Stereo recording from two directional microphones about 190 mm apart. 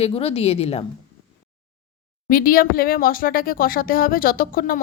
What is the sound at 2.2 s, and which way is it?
Speech, 50° left (ahead or behind).